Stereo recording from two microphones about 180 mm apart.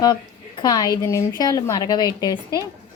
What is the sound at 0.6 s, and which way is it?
A woman's voice, 25° left (ahead or behind).